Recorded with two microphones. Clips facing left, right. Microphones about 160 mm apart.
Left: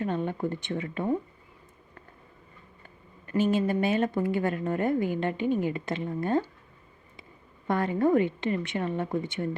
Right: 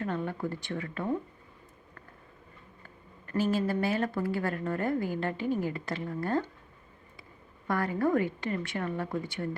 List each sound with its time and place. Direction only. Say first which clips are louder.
0.0 s speech: left 4 dB; 20° left (ahead or behind)
3.2 s a woman's voice: left 3 dB; 20° left (ahead or behind)
7.7 s a woman's voice: left 4 dB; 20° left (ahead or behind)